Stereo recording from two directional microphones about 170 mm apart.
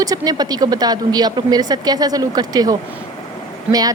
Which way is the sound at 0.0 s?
20° right (ahead or behind).